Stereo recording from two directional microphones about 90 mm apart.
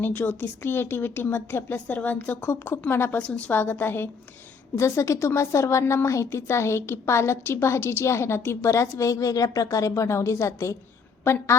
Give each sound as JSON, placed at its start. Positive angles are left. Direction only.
{"t": 0.0, "sound": "a woman's voice", "side_deg": 20}